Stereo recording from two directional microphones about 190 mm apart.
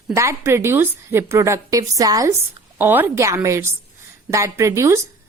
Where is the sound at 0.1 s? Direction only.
15° right (ahead or behind).